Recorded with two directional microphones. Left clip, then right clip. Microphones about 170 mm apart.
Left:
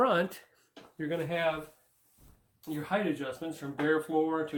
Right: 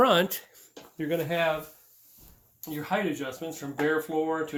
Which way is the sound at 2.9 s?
25° right (ahead or behind).